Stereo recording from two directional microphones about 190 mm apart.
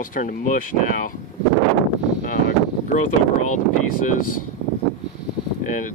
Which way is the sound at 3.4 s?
40° left (ahead or behind).